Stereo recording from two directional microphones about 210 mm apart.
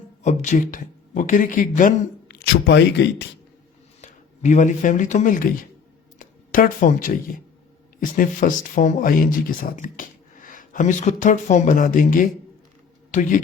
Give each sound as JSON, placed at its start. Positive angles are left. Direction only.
{"t": 0.2, "sound": "speech", "side_deg": 35}
{"t": 4.0, "sound": "speech", "side_deg": 35}